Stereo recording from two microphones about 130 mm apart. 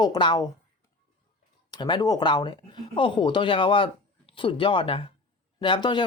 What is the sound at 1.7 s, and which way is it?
Speech, 35° left (ahead or behind).